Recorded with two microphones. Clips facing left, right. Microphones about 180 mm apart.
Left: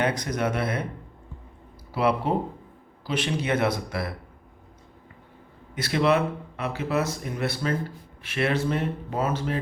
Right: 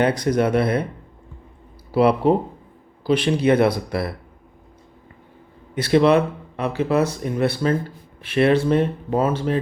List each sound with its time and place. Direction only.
0.0 s speech: 30° right (ahead or behind)
1.9 s speech: 30° right (ahead or behind)
5.7 s speech: 30° right (ahead or behind)